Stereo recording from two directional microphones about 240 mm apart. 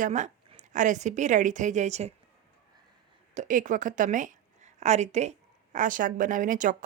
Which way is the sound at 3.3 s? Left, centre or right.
Right.